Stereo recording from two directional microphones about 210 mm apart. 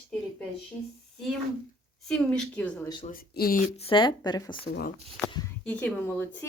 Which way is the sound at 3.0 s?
45° left (ahead or behind).